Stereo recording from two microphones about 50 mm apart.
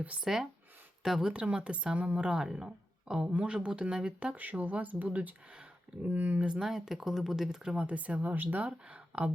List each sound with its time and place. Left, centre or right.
0.2 s speech: centre
1.3 s speech: right
6.7 s speech: centre
7.9 s speech: right